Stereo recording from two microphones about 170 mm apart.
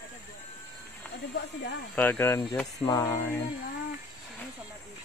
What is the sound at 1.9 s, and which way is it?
Speech, 10° left (ahead or behind).